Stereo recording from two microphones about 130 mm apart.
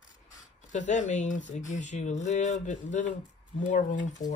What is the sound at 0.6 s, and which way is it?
Speech, 70° left (ahead or behind).